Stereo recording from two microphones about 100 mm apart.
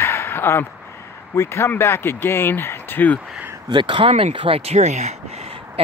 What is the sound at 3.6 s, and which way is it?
Speech, 55° right (ahead or behind).